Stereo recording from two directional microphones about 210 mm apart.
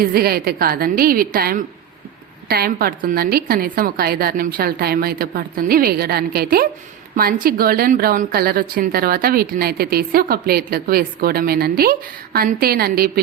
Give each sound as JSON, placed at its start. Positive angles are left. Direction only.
{"t": 0.0, "sound": "a woman's voice", "side_deg": -45}